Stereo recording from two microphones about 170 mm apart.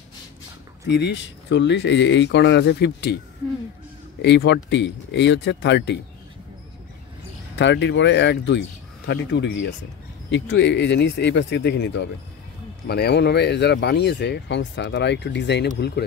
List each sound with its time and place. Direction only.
0.8 s speech: 90° left
4.2 s speech: 90° left
7.5 s speech: 90° left
12.8 s speech: 70° left (ahead or behind)